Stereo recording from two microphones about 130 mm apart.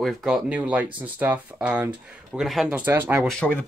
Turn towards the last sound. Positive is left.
turn(degrees=10)  # may be behind; listen again after turning